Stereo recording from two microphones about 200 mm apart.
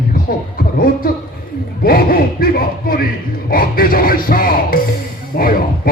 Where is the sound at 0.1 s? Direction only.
45° left (ahead or behind).